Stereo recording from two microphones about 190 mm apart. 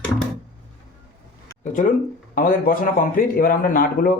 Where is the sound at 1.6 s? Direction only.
45° left (ahead or behind).